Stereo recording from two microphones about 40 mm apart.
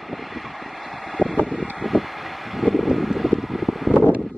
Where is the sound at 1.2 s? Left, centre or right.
Right.